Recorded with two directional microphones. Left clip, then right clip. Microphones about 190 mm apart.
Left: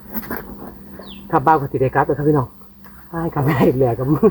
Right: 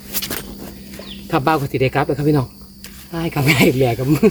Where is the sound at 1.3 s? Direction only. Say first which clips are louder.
Left 3 dB; 25° right (ahead or behind).